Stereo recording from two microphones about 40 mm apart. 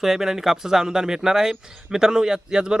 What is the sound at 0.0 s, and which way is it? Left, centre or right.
Speech, centre.